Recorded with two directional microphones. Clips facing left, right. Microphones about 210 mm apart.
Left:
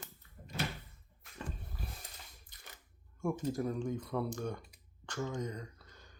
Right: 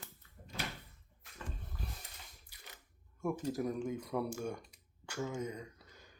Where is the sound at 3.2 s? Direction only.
5° right (ahead or behind).